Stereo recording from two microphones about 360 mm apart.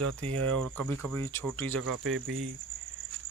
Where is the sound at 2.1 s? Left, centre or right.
Right.